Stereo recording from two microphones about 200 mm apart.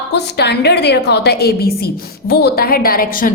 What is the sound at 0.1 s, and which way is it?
A woman's voice, 55° left (ahead or behind).